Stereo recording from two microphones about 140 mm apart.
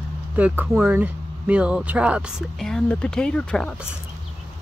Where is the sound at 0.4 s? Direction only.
10° right (ahead or behind).